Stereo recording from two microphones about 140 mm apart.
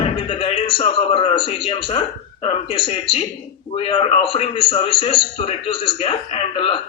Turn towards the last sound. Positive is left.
turn(degrees=40)  # may be behind; listen again after turning